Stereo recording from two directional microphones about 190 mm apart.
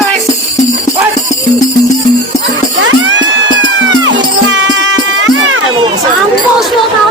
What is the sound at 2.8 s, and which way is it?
Music, 70° right (ahead or behind).